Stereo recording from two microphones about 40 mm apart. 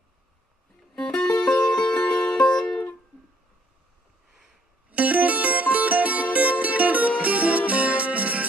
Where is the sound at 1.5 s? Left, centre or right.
Left.